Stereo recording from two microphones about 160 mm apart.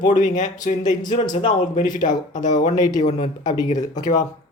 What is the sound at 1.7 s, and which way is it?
Speech, 50° left (ahead or behind).